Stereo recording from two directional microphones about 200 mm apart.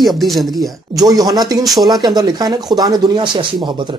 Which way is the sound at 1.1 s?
20° right (ahead or behind).